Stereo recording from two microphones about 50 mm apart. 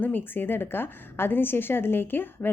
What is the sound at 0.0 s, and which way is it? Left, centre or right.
A woman's voice, left.